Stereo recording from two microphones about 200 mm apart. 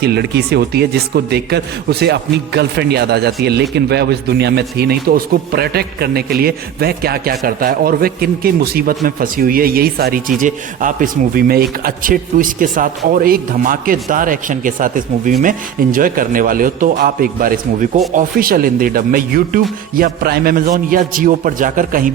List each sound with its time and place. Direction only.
0.0 s speech: 55° right (ahead or behind)